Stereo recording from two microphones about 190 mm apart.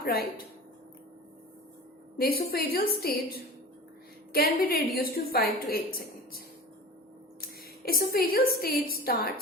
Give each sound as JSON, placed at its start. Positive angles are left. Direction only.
{"t": 0.0, "sound": "a woman's voice", "side_deg": 50}
{"t": 2.1, "sound": "a woman's voice", "side_deg": 55}
{"t": 7.4, "sound": "a woman's voice", "side_deg": 50}